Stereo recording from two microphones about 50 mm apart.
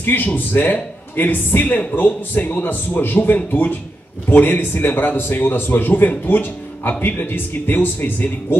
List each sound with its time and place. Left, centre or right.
0.0 s a man's voice: left